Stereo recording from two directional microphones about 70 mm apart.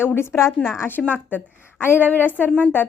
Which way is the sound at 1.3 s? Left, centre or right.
Left.